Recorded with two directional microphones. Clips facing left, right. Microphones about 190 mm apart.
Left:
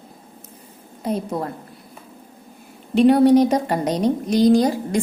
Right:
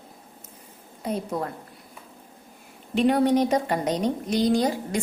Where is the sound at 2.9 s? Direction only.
35° left (ahead or behind).